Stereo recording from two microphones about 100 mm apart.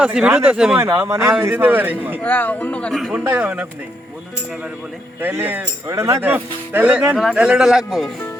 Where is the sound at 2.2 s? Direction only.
20° left (ahead or behind).